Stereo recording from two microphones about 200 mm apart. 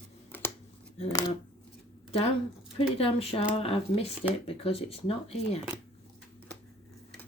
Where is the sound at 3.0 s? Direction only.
30° left (ahead or behind).